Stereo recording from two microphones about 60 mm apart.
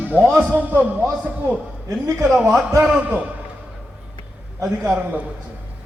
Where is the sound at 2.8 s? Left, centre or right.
Centre.